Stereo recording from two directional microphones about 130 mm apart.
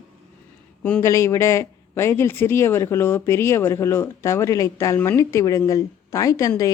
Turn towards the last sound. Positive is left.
turn(degrees=25)  # may be behind; listen again after turning